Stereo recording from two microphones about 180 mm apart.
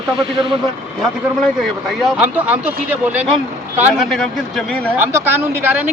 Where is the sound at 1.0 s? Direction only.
Centre (ahead or behind).